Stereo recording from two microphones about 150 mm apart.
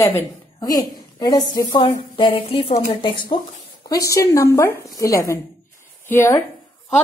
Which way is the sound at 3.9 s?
20° left (ahead or behind).